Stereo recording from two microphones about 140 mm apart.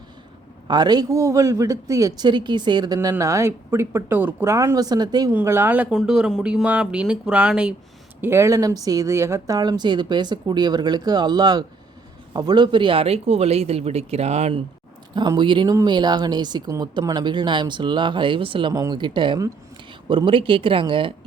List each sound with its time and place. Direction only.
0.7 s a man's voice: 30° right (ahead or behind)
5.3 s speech: 15° right (ahead or behind)
8.2 s a man's voice: 20° right (ahead or behind); by 14.6 s 50° right (ahead or behind)
15.1 s speech: 30° right (ahead or behind)